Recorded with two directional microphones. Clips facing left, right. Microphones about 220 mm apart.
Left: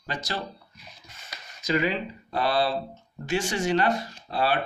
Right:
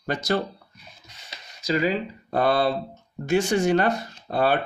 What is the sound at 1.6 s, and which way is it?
Speech, 40° right (ahead or behind).